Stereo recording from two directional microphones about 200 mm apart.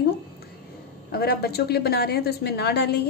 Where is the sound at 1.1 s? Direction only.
50° left (ahead or behind).